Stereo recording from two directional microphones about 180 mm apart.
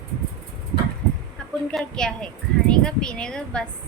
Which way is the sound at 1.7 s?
5° left (ahead or behind).